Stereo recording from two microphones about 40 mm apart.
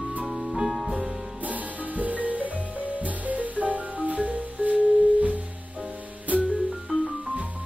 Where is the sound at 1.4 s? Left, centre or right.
Right.